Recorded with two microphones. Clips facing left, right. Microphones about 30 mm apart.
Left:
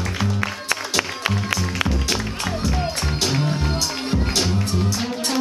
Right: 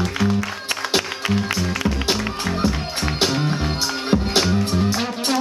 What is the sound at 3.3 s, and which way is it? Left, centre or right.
Music, centre.